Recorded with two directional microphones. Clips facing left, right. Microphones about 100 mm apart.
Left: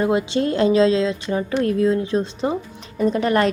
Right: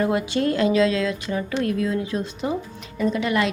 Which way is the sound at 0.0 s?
25° left (ahead or behind).